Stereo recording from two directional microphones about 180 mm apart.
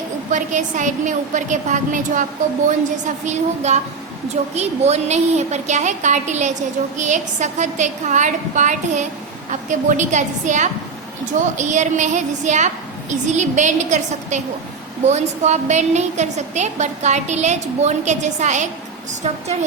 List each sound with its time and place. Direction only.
0.3 s a woman's voice: 45° right (ahead or behind)
3.2 s a woman's voice: 40° right (ahead or behind)